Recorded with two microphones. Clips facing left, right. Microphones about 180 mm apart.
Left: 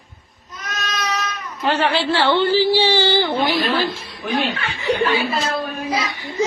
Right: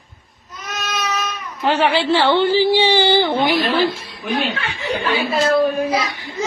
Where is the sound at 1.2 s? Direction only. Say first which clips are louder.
Right 2 dB; 15° right (ahead or behind).